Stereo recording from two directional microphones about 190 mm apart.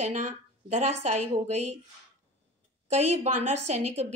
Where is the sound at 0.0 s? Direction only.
40° right (ahead or behind).